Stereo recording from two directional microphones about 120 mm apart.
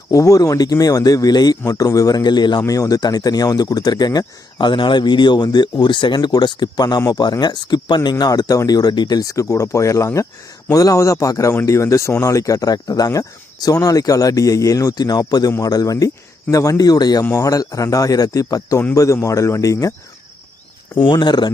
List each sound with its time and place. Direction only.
0.1 s speech: 30° left (ahead or behind)
20.9 s speech: 40° left (ahead or behind)